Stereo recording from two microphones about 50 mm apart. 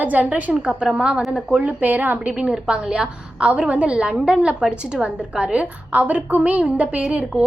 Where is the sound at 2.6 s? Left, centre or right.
Right.